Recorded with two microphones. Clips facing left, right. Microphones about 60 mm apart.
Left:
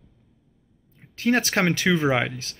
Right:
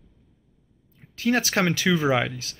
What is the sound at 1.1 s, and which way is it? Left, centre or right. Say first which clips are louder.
Speech: left 1 dB; left.